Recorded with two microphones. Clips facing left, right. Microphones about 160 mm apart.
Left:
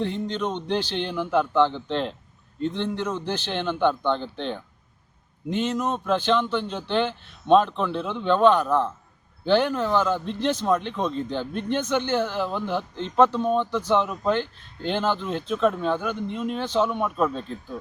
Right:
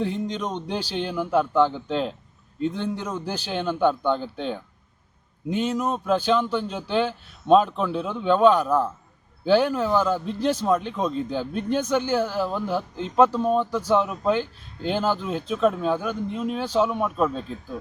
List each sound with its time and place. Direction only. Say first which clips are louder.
0.0 s a man's voice: even; 5° right (ahead or behind)